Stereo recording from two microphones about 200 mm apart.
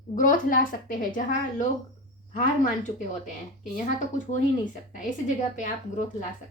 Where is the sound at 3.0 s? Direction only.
40° left (ahead or behind).